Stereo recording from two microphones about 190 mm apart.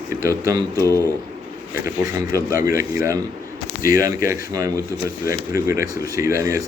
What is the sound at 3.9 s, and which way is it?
Speech, 15° right (ahead or behind).